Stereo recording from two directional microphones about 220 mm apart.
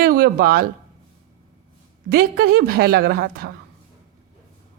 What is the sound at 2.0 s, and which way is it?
A woman's voice, 45° right (ahead or behind).